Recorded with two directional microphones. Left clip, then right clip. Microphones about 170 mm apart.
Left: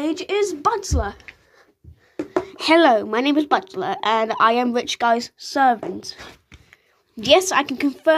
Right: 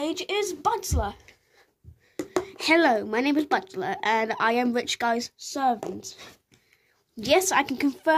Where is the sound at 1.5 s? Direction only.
55° right (ahead or behind).